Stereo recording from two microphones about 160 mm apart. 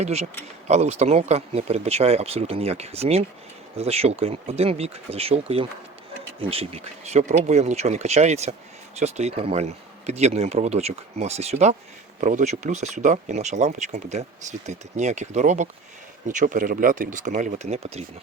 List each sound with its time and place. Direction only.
0.0 s speech: 40° right (ahead or behind)